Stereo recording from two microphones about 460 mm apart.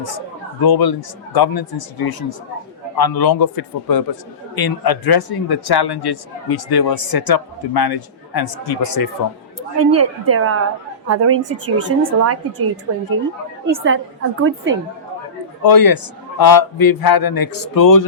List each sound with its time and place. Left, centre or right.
0.6 s a man's voice: left
9.7 s a woman's voice: right
13.8 s a woman's voice: right
15.6 s a man's voice: left